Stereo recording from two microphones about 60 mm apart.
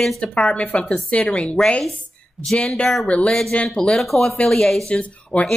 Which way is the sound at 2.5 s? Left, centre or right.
Centre.